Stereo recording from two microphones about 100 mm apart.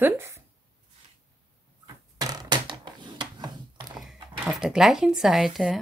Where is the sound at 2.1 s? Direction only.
40° right (ahead or behind).